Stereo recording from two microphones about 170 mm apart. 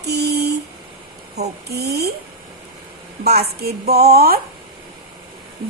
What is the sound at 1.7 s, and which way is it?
Speech, 70° right (ahead or behind).